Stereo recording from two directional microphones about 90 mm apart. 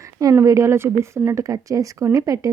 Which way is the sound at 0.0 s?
40° right (ahead or behind).